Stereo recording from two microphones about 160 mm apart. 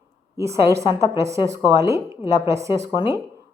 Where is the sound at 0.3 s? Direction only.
20° right (ahead or behind).